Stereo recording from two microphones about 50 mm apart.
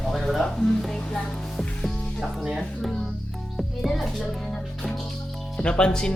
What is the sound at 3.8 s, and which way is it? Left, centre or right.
Music, centre.